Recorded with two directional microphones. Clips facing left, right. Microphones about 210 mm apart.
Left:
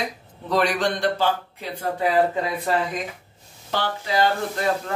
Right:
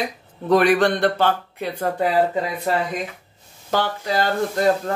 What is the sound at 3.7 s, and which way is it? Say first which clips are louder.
Speech: right 2 dB; 45° right (ahead or behind).